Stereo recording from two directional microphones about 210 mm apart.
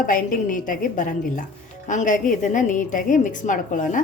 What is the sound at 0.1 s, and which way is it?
A woman's voice, 40° left (ahead or behind).